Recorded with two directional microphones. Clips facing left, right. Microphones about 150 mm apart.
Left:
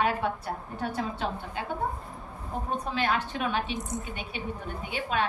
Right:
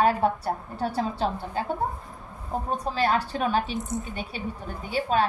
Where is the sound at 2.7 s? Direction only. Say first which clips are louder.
Right 4 dB; 35° right (ahead or behind).